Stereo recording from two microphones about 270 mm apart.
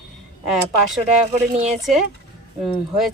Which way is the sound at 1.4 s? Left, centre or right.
Right.